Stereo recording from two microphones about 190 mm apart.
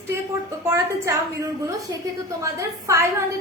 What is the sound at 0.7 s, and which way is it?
A woman's voice, 15° right (ahead or behind).